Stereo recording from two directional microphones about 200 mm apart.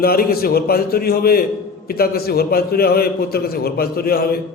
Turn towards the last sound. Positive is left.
turn(degrees=50)  # may be behind; listen again after turning